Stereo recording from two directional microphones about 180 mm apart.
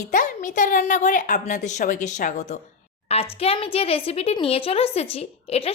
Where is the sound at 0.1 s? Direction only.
45° left (ahead or behind).